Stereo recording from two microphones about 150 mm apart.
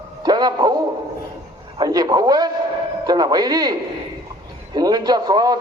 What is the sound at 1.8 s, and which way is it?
A man's voice, 25° right (ahead or behind).